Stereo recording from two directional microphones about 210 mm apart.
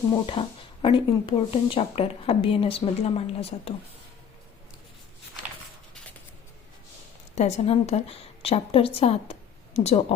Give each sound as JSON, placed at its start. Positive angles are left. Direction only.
{"t": 0.3, "sound": "speech", "side_deg": 25}
{"t": 7.3, "sound": "a woman's voice", "side_deg": 30}